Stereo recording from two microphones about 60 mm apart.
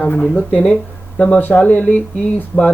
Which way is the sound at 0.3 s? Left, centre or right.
Left.